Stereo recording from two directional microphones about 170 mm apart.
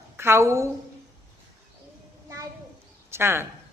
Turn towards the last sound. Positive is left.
turn(degrees=-15)  # may be behind; listen again after turning